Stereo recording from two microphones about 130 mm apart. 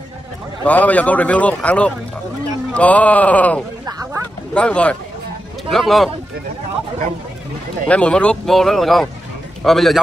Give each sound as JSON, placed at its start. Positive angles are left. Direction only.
{"t": 0.7, "sound": "speech", "side_deg": 10}
{"t": 3.8, "sound": "a sound", "side_deg": -25}
{"t": 4.6, "sound": "speech", "side_deg": 10}
{"t": 7.9, "sound": "a man's voice", "side_deg": 10}